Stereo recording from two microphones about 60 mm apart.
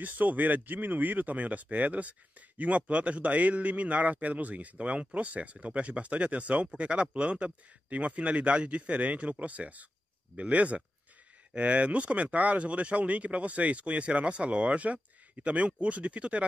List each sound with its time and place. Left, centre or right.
0.0 s speech: right